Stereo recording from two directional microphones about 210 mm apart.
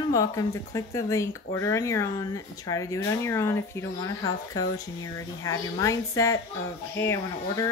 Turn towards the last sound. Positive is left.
turn(degrees=15)  # may be behind; listen again after turning